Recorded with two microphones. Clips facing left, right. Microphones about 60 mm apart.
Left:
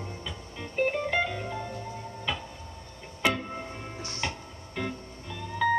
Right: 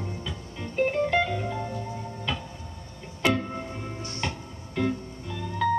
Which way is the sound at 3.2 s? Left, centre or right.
Centre.